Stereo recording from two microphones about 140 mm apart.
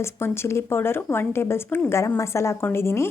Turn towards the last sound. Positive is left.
turn(degrees=20)  # may be behind; listen again after turning